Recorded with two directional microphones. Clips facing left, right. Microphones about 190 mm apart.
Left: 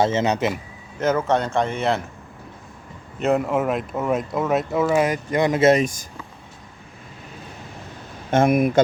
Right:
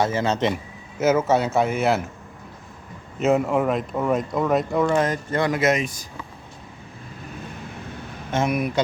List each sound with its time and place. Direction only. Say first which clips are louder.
0.0 s a man's voice: left 2 dB; 20° left (ahead or behind)
0.9 s speech: right 1 dB; 5° right (ahead or behind)
3.2 s speech: right 1 dB; centre (ahead or behind); by 5.8 s 30° left (ahead or behind)
5.8 s speech: left 5 dB; 45° left (ahead or behind)
8.3 s speech: left 6 dB; 50° left (ahead or behind)